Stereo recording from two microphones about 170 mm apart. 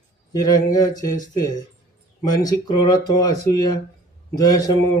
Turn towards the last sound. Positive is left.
turn(degrees=20)  # may be behind; listen again after turning